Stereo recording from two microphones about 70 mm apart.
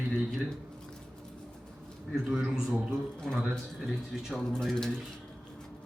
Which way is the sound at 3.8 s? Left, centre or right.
Centre.